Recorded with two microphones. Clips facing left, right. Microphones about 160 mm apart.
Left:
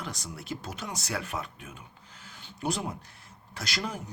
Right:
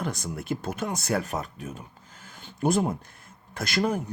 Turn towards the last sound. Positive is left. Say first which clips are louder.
# right 9 dB
turn(degrees=-55)  # may be behind; listen again after turning